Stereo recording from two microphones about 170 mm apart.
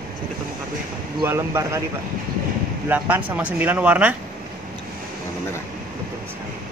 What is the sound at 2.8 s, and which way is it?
Speech, 10° right (ahead or behind).